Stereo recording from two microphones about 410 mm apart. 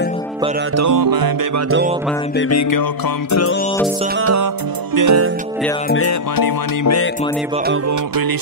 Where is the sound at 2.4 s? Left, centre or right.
Left.